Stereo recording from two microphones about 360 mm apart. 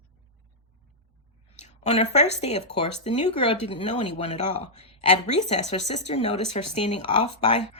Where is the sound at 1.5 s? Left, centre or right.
Centre.